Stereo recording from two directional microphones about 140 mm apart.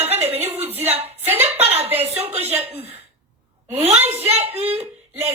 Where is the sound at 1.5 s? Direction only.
45° right (ahead or behind).